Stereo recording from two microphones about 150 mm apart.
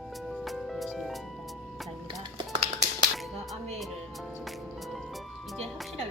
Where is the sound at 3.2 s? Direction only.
Centre (ahead or behind).